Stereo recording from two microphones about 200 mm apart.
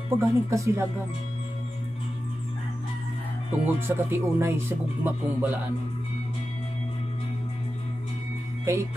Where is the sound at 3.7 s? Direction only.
10° right (ahead or behind).